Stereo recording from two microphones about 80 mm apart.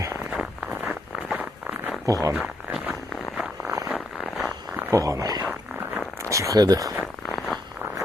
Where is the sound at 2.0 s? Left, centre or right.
Right.